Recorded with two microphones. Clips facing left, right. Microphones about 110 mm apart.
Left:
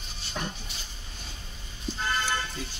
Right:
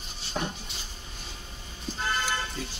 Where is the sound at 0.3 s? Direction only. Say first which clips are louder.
Right 3 dB; 15° right (ahead or behind).